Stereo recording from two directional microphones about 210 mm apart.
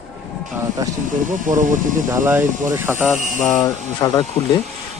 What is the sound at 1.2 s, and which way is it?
Speech, 40° right (ahead or behind).